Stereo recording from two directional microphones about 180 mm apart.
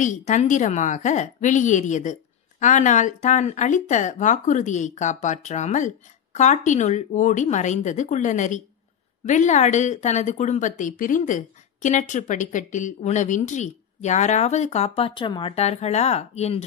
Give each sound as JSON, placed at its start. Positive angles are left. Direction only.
{"t": 0.0, "sound": "a woman's voice", "side_deg": 45}